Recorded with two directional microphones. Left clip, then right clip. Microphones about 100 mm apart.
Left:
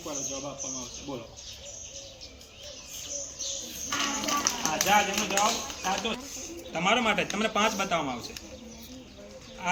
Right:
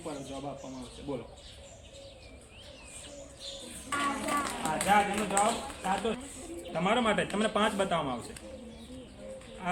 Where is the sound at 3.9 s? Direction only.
10° right (ahead or behind).